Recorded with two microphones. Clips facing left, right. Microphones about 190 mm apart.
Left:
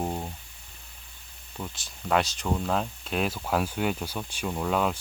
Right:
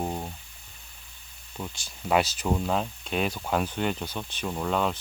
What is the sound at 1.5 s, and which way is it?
Speech, centre (ahead or behind).